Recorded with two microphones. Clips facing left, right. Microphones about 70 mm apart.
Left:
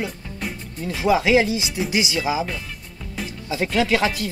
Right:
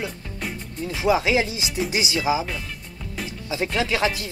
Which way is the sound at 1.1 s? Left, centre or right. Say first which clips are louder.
Left 3 dB; left.